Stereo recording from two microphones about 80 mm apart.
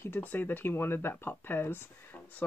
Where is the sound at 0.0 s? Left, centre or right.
Left.